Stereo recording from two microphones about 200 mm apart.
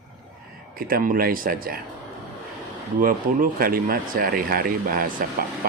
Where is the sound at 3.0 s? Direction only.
45° right (ahead or behind).